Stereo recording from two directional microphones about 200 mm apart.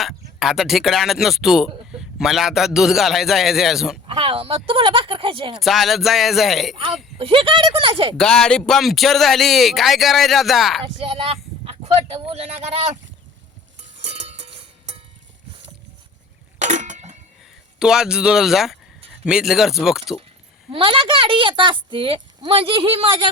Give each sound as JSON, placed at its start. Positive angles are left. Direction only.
{"t": 0.0, "sound": "speech", "side_deg": 0}
{"t": 4.0, "sound": "speech", "side_deg": -25}
{"t": 5.5, "sound": "speech", "side_deg": 0}
{"t": 7.2, "sound": "speech", "side_deg": -25}
{"t": 8.1, "sound": "speech", "side_deg": 5}
{"t": 11.0, "sound": "speech", "side_deg": -25}
{"t": 14.0, "sound": "music", "side_deg": -30}
{"t": 16.6, "sound": "a sound", "side_deg": -35}
{"t": 17.7, "sound": "speech", "side_deg": -5}
{"t": 20.7, "sound": "speech", "side_deg": -25}